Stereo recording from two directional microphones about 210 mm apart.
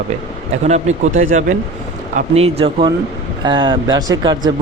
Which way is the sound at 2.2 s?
30° right (ahead or behind).